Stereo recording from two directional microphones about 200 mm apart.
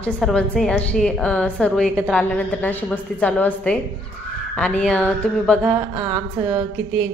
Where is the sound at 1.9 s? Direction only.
Centre (ahead or behind).